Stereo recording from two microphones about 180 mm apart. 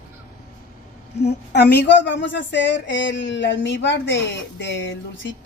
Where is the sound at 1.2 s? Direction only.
70° left (ahead or behind).